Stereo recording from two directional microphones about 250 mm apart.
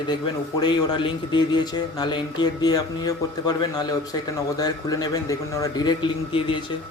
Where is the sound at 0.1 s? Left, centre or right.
Centre.